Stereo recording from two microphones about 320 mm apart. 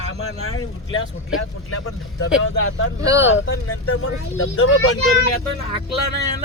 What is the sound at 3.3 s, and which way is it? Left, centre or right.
Speech, left.